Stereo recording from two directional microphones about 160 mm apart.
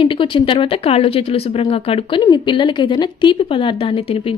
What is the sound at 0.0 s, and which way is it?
Speech, 30° left (ahead or behind).